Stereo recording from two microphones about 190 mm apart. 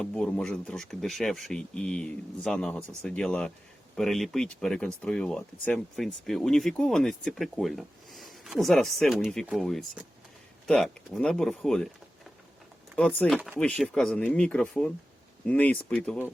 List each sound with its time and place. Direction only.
0.0 s speech: 5° left (ahead or behind)
13.0 s speech: 5° left (ahead or behind)